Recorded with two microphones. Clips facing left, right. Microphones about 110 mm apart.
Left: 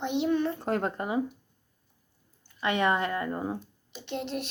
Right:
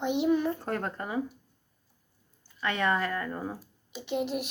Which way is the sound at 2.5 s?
20° left (ahead or behind).